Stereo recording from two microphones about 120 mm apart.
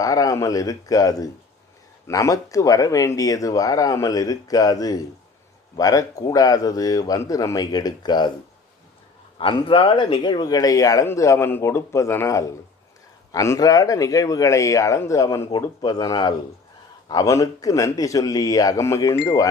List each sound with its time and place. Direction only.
0.0 s speech: 30° left (ahead or behind)
9.4 s speech: 45° left (ahead or behind); by 19.5 s 30° left (ahead or behind)